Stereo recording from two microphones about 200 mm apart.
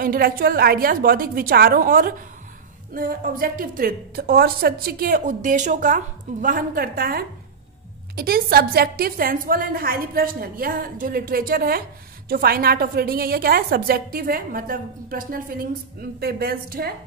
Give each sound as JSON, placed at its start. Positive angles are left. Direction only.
{"t": 0.0, "sound": "a woman's voice", "side_deg": -45}